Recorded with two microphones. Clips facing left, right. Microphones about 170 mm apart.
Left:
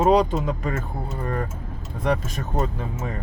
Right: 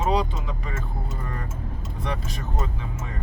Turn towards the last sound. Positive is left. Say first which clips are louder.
# left 6 dB
turn(degrees=50)  # may be behind; listen again after turning